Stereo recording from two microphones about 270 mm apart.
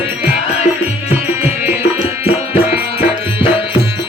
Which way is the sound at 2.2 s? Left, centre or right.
Left.